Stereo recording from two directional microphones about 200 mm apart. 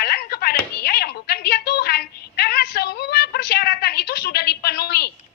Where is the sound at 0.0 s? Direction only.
50° left (ahead or behind).